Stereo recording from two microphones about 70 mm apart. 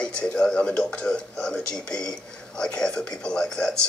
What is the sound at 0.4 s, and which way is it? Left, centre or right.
Speech, centre.